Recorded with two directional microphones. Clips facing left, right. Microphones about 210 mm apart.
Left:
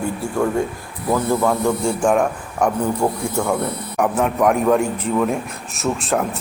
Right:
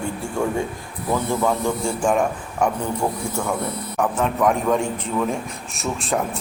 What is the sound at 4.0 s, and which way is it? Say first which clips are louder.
A man's voice: left 3 dB; 10° left (ahead or behind).